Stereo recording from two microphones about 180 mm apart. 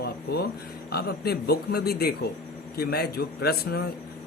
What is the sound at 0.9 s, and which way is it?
Speech, 60° left (ahead or behind).